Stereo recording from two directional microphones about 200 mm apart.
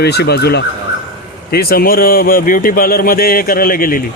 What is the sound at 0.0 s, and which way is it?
Speech, 55° left (ahead or behind).